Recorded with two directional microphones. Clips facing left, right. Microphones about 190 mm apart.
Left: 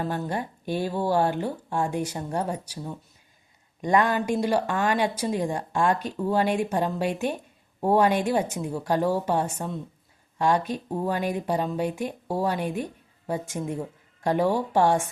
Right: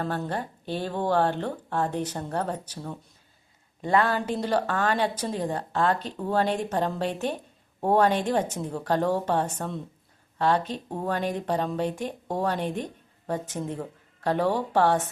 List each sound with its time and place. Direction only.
0.3 s speech: 10° left (ahead or behind)